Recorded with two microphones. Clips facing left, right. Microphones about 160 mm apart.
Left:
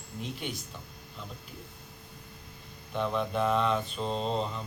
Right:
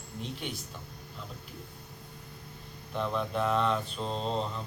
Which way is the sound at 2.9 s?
Centre (ahead or behind).